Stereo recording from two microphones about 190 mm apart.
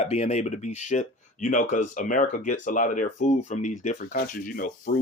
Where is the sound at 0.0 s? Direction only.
35° left (ahead or behind).